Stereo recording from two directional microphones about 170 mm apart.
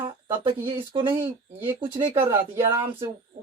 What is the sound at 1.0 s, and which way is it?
Speech, 15° right (ahead or behind).